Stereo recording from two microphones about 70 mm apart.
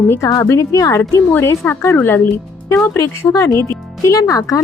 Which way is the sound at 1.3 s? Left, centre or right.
Left.